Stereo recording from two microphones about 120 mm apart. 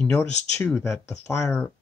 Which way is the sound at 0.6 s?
20° left (ahead or behind).